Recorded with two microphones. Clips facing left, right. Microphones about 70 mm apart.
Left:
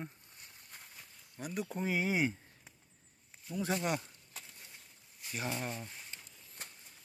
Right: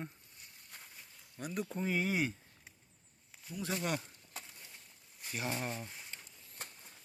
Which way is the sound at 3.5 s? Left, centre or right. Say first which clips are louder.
Left 4 dB; left.